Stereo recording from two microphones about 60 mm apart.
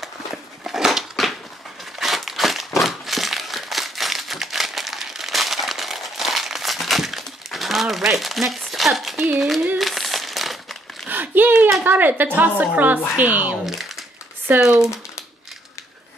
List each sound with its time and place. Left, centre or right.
0.0 s a sound: centre
2.0 s crumpling: centre
8.1 s speech: centre
9.8 s crumpling: centre
11.1 s a sound: right
11.8 s a woman's voice: right
13.7 s crumpling: centre
14.6 s speech: centre